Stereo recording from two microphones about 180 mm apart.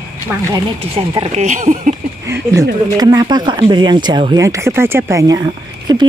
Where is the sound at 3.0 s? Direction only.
20° right (ahead or behind).